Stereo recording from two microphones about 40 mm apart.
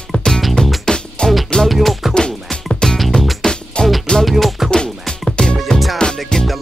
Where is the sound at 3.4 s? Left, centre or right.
Centre.